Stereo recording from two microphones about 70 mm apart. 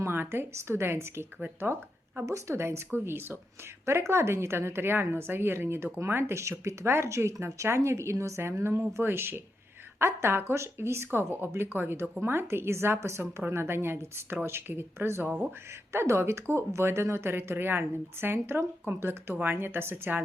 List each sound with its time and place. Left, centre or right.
0.0 s speech: right
2.2 s speech: right
15.3 s speech: centre
15.9 s speech: right